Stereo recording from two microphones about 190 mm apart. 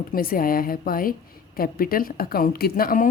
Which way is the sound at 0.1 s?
50° left (ahead or behind).